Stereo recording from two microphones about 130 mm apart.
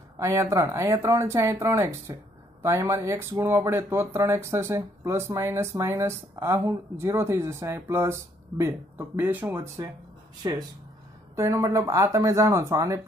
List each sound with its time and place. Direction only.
0.2 s speech: 20° right (ahead or behind)
10.4 s speech: 35° right (ahead or behind)
11.3 s speech: 20° right (ahead or behind)